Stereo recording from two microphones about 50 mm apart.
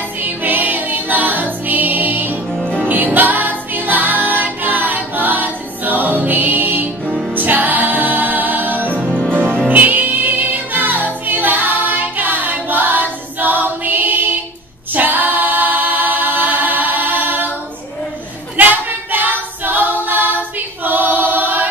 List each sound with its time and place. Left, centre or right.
0.2 s music: right
2.6 s music: centre
2.9 s music: right
9.1 s music: left
9.7 s music: right
15.0 s a capella: right
18.6 s a capella: right
20.8 s choir: right